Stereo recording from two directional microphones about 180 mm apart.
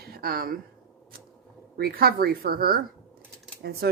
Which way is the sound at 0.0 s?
55° right (ahead or behind).